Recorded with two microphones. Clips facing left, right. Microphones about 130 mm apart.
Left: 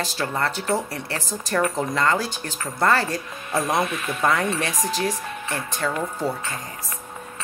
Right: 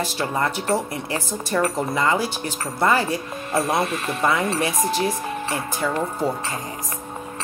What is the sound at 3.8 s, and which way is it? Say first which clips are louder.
Speech: right 1 dB; 30° right (ahead or behind).